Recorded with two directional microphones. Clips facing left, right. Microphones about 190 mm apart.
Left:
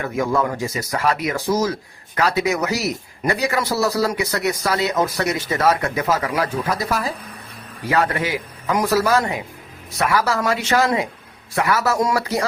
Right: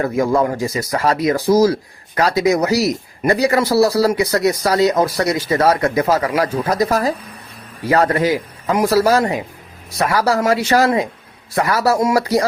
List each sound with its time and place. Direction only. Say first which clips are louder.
0.0 s speech: right 5 dB; 35° right (ahead or behind)